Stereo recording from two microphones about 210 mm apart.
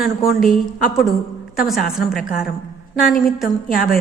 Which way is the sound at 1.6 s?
Centre (ahead or behind).